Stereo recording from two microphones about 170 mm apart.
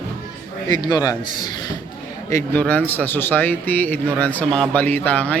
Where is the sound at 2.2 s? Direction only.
15° left (ahead or behind).